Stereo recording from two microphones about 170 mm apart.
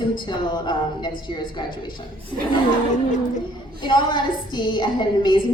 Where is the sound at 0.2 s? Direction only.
25° left (ahead or behind).